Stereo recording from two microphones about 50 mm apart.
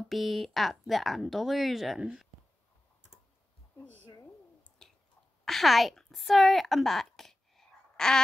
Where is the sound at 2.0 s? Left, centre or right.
Centre.